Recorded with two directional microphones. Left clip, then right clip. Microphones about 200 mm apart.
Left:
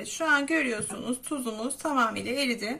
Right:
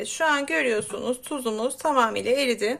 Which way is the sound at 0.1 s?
45° right (ahead or behind).